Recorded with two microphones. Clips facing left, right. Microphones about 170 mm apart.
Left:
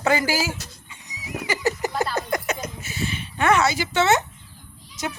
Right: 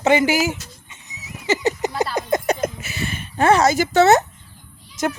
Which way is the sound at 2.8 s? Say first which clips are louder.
Right 1 dB; 75° right (ahead or behind).